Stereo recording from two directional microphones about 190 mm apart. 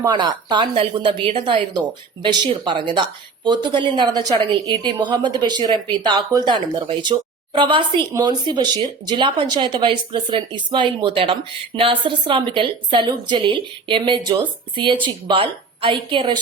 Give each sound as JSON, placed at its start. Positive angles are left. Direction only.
{"t": 0.0, "sound": "speech", "side_deg": -25}